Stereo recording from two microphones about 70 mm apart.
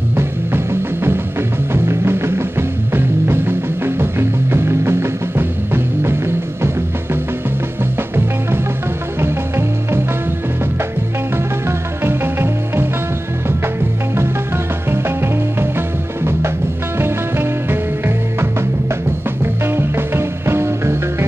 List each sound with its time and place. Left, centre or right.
0.1 s music: right
1.7 s music: right
9.2 s music: right
12.0 s music: right
17.0 s music: right